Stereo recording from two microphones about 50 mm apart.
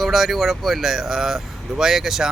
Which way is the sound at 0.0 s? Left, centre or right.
Centre.